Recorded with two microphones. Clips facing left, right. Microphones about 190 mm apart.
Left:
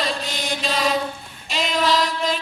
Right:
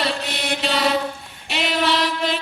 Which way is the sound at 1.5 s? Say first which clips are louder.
Even; 75° right (ahead or behind).